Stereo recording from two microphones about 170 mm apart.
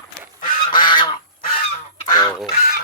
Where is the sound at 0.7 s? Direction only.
25° left (ahead or behind).